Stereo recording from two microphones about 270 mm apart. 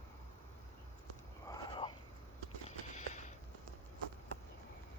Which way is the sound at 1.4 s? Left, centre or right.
Centre.